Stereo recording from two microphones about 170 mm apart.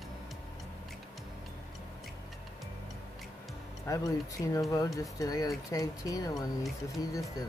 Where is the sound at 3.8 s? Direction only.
20° left (ahead or behind).